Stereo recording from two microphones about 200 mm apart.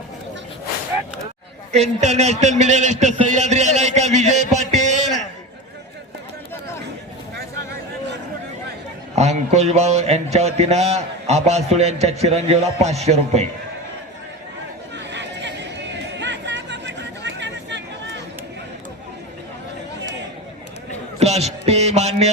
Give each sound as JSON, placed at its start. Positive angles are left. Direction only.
{"t": 1.7, "sound": "a man's voice", "side_deg": -35}
{"t": 9.1, "sound": "a man's voice", "side_deg": -35}
{"t": 14.9, "sound": "a sound", "side_deg": -60}
{"t": 16.1, "sound": "chatter", "side_deg": -60}
{"t": 21.2, "sound": "music", "side_deg": -35}